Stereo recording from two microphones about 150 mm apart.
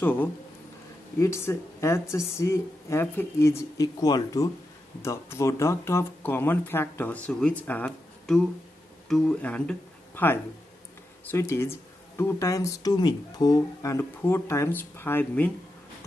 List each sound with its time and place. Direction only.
0.0 s speech: 15° left (ahead or behind)